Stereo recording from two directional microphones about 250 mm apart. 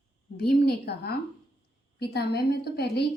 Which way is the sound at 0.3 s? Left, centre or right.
Left.